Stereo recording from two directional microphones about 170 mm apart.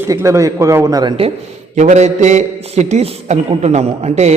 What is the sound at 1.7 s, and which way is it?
A man's voice, 45° right (ahead or behind).